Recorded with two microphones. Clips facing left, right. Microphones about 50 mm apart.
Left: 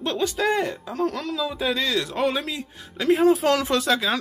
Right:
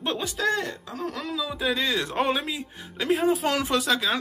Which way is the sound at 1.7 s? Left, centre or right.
Centre.